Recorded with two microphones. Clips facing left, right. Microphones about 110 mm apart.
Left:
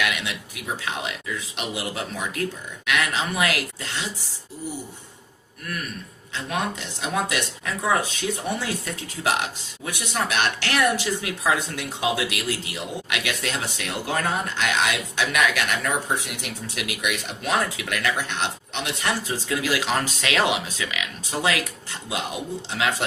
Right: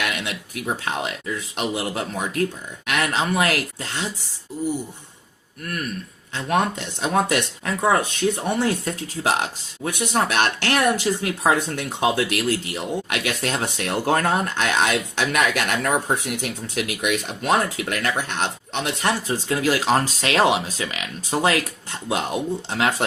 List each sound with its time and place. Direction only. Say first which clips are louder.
0.0 s speech: even; 40° right (ahead or behind)
7.0 s speech: right 5 dB; 50° right (ahead or behind)
8.4 s speech: right 5 dB; 45° right (ahead or behind); by 14.7 s 65° right (ahead or behind)
14.8 s speech: right 3 dB; 40° right (ahead or behind)
22.7 s speech: right 2 dB; 45° right (ahead or behind)